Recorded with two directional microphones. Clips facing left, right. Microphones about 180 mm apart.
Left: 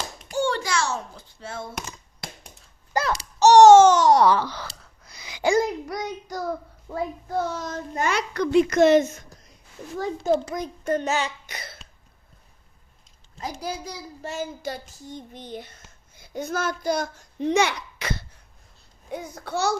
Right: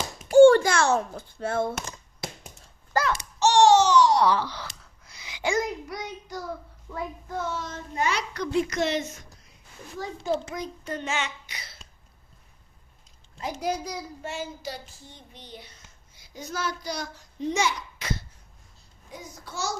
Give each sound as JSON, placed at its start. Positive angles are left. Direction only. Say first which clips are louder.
{"t": 0.3, "sound": "babbling", "louder": "right 12 dB", "side_deg": -50}
{"t": 3.0, "sound": "babbling", "louder": "left 4 dB", "side_deg": 35}
{"t": 5.0, "sound": "a child's voice", "louder": "left 6 dB", "side_deg": 40}
{"t": 10.4, "sound": "a child's voice", "louder": "left 5 dB", "side_deg": 45}
{"t": 13.4, "sound": "a child's voice", "louder": "right 2 dB", "side_deg": 30}